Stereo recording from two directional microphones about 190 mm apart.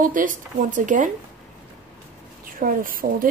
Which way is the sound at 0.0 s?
45° right (ahead or behind).